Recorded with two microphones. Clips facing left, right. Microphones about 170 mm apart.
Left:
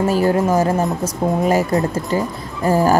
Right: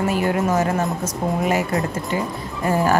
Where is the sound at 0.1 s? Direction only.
35° left (ahead or behind).